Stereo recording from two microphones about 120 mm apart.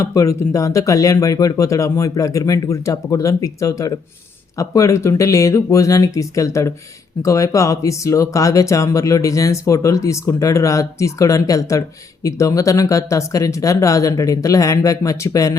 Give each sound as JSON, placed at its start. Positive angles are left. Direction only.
{"t": 0.0, "sound": "speech", "side_deg": 25}